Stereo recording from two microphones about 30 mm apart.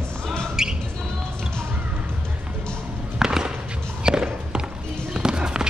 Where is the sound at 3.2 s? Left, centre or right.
Right.